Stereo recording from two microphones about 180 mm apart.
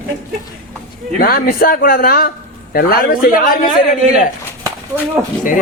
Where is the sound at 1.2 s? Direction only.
55° left (ahead or behind).